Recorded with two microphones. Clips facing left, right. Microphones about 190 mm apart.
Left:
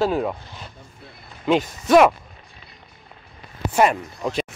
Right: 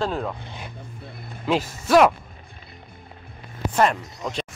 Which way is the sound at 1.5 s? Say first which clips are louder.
Left 3 dB; centre (ahead or behind).